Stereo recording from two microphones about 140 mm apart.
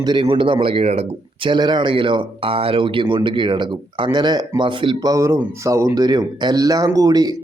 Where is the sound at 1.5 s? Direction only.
30° right (ahead or behind).